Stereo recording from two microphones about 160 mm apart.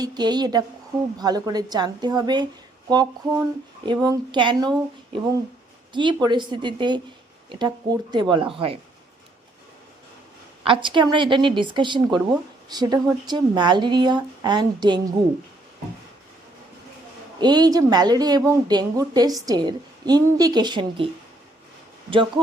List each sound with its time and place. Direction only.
0.0 s a woman's voice: 25° right (ahead or behind)
3.8 s a woman's voice: 25° right (ahead or behind)
10.6 s a woman's voice: 30° right (ahead or behind)
17.4 s a woman's voice: 25° right (ahead or behind)